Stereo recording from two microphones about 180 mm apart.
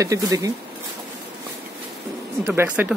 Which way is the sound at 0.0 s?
20° right (ahead or behind).